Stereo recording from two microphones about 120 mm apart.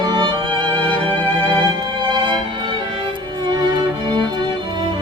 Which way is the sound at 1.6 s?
40° right (ahead or behind).